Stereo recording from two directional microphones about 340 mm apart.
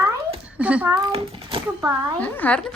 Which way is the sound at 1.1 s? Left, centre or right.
Centre.